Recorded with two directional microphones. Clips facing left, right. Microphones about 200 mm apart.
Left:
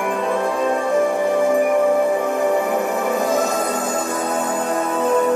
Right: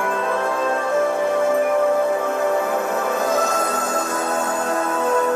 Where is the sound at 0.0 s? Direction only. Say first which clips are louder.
Left 2 dB; 15° left (ahead or behind).